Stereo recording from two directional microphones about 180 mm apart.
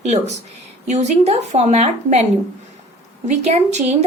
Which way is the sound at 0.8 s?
40° right (ahead or behind).